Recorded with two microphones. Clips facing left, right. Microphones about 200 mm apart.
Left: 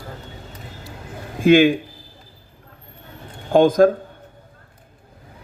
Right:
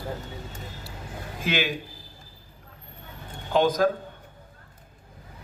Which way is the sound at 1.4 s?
50° left (ahead or behind).